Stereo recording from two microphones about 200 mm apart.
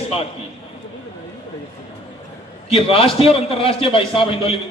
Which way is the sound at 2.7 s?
30° left (ahead or behind).